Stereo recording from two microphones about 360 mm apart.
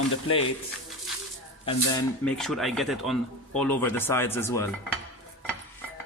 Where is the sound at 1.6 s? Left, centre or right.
Centre.